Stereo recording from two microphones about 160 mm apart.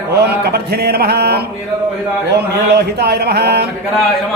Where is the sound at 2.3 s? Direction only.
90° right.